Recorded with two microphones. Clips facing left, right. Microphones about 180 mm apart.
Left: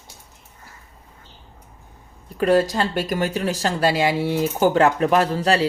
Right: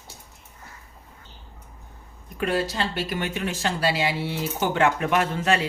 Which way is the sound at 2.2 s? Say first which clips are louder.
Left 8 dB; 35° left (ahead or behind).